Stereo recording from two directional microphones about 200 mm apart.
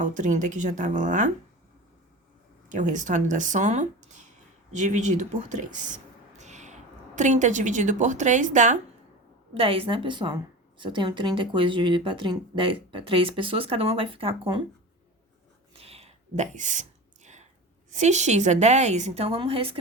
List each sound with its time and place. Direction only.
0.0 s a woman's voice: 40° right (ahead or behind)
2.6 s a woman's voice: 40° right (ahead or behind)
15.8 s a sound: 30° right (ahead or behind)
17.9 s a woman's voice: 35° right (ahead or behind)